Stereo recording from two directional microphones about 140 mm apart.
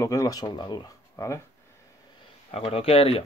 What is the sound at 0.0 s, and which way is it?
Speech, 25° left (ahead or behind).